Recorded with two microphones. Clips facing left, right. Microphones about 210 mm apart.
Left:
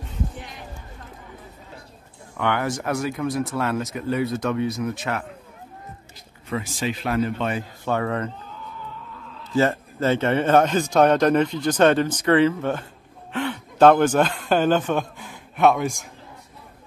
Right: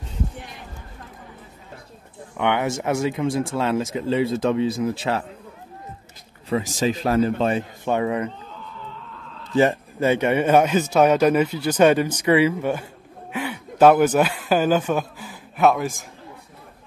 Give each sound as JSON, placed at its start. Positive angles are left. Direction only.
{"t": 2.3, "sound": "speech", "side_deg": -20}
{"t": 6.5, "sound": "a man's voice", "side_deg": -40}
{"t": 7.8, "sound": "speech", "side_deg": -15}
{"t": 9.6, "sound": "speech", "side_deg": -15}